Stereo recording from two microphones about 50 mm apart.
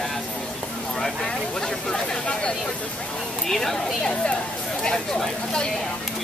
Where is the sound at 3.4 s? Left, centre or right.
Centre.